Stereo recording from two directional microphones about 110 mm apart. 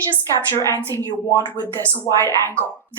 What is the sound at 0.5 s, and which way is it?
Speech, 30° left (ahead or behind).